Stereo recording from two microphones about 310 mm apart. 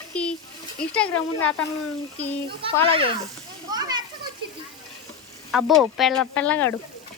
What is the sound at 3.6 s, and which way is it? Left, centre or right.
Children playing, centre.